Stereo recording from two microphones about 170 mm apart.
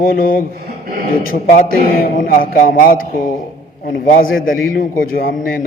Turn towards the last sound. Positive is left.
turn(degrees=55)  # may be behind; listen again after turning